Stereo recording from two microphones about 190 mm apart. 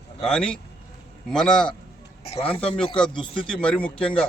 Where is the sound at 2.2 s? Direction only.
30° left (ahead or behind).